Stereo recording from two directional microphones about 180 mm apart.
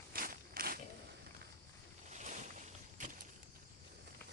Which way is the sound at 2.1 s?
40° right (ahead or behind).